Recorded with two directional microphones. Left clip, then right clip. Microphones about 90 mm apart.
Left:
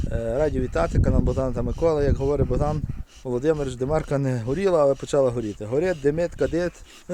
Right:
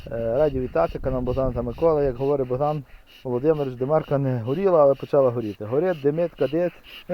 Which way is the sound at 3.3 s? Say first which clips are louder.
Right 1 dB; 15° left (ahead or behind).